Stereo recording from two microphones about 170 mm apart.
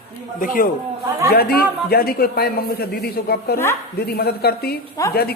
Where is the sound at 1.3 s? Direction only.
65° left (ahead or behind).